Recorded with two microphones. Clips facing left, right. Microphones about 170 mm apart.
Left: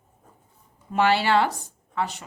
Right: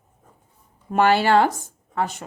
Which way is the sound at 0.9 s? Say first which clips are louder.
Right 3 dB; 50° right (ahead or behind).